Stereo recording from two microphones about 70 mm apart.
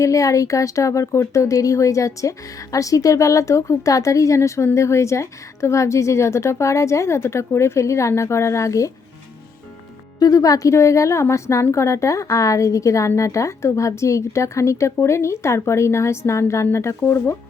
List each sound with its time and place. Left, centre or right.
0.0 s a woman's voice: left
10.2 s a woman's voice: left